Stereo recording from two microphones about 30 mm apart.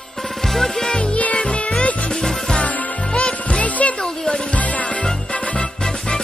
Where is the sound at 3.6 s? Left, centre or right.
Left.